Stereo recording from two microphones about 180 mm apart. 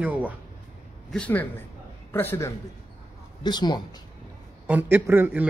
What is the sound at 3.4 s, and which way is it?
Speech, 25° left (ahead or behind).